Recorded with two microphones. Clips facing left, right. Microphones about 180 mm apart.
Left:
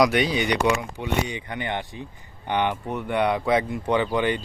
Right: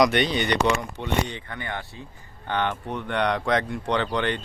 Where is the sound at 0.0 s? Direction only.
5° left (ahead or behind).